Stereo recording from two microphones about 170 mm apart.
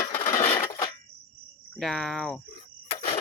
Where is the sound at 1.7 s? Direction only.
Centre (ahead or behind).